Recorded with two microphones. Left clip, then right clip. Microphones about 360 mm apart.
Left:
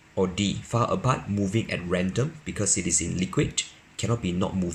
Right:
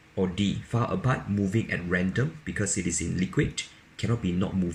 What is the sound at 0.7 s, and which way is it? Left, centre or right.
Speech, centre.